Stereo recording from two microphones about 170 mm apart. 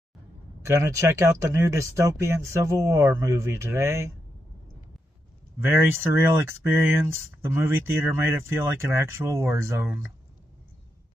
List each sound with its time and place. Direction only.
0.6 s speech: 15° right (ahead or behind)
5.6 s speech: 15° right (ahead or behind)